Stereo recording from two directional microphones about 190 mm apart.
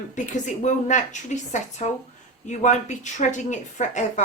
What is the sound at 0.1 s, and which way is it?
A woman's voice, 40° left (ahead or behind).